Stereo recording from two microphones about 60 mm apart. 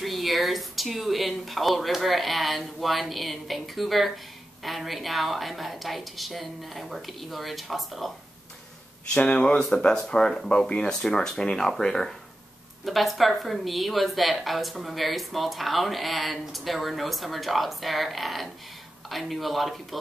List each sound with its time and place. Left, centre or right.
0.0 s speech: centre
9.0 s speech: centre